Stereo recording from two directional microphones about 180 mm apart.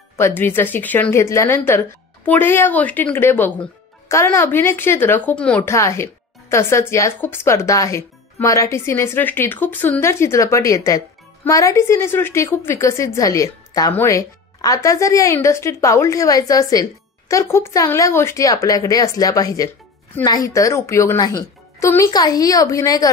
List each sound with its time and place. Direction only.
0.2 s speech: 10° left (ahead or behind)